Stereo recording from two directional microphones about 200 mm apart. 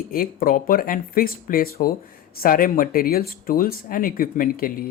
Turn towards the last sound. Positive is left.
turn(degrees=45)  # may be behind; listen again after turning